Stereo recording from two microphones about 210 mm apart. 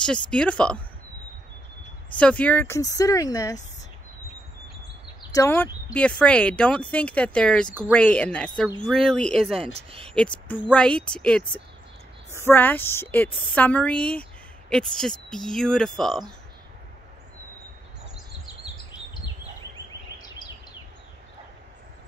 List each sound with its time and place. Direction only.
0.0 s speech: 5° left (ahead or behind)
2.1 s speech: 5° left (ahead or behind)
5.2 s speech: 15° left (ahead or behind)
9.8 s speech: 25° right (ahead or behind)
10.1 s speech: 5° left (ahead or behind)
19.9 s a sound: 20° left (ahead or behind)